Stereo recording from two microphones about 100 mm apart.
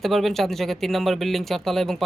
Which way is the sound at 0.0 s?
Centre (ahead or behind).